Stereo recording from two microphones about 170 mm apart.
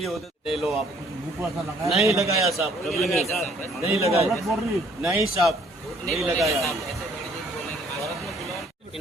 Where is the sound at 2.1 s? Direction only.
Centre (ahead or behind).